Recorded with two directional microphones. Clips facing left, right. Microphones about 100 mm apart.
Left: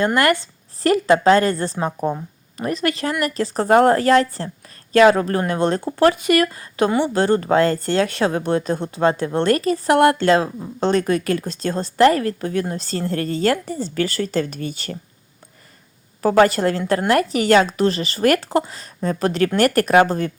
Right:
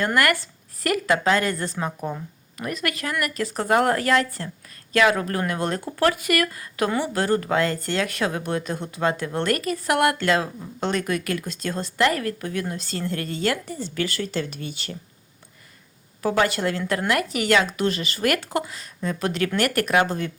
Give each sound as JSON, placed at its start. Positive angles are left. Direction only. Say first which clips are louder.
{"t": 0.0, "sound": "a woman's voice", "louder": "left 4 dB", "side_deg": 25}
{"t": 16.2, "sound": "a woman's voice", "louder": "left 7 dB", "side_deg": 40}